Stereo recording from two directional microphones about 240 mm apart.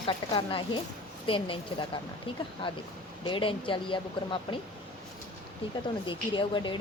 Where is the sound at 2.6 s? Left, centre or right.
Left.